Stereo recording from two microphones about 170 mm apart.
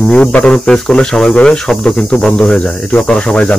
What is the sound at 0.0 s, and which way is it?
A man's voice, 5° left (ahead or behind).